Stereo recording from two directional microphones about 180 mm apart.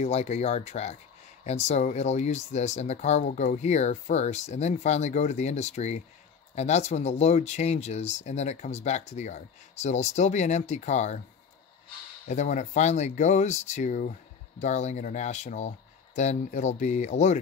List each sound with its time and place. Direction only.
0.0 s speech: 35° left (ahead or behind)
12.3 s speech: 40° left (ahead or behind)